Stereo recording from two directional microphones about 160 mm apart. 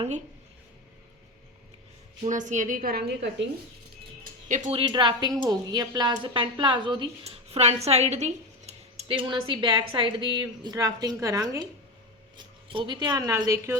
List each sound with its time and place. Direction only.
2.2 s a woman's voice: 50° right (ahead or behind); by 3.2 s 90° right
4.4 s speech: 50° right (ahead or behind)
4.7 s speech: 30° right (ahead or behind)
7.3 s speech: 40° right (ahead or behind); by 13.7 s 20° right (ahead or behind)